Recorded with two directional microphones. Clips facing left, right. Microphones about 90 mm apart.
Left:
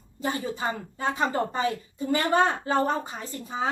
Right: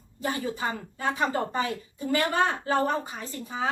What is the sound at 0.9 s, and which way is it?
Speech, 30° left (ahead or behind).